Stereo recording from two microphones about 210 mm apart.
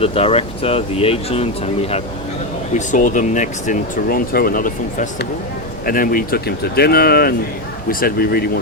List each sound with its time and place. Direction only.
0.0 s speech: 30° left (ahead or behind); by 8.4 s 45° left (ahead or behind)